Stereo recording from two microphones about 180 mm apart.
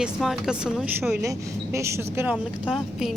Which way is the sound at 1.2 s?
15° right (ahead or behind).